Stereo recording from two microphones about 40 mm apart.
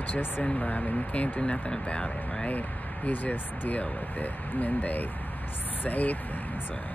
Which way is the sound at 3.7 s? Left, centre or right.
Left.